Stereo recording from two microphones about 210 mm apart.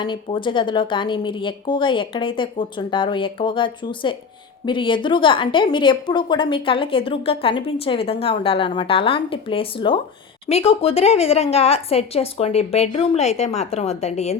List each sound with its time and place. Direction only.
0.0 s a woman's voice: 25° left (ahead or behind)